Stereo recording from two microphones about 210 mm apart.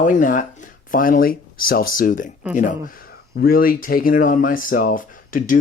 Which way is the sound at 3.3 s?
45° left (ahead or behind).